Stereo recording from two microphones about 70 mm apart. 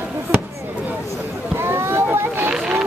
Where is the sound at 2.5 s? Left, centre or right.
Centre.